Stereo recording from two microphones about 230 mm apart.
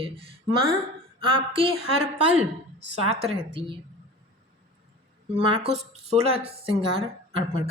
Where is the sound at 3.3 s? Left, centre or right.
Right.